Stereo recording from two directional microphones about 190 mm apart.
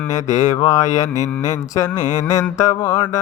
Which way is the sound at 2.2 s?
15° left (ahead or behind).